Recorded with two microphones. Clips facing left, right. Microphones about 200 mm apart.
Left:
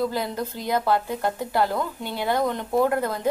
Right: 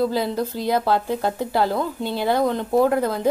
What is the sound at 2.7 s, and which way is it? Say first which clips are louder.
Speech: right 3 dB; 20° right (ahead or behind).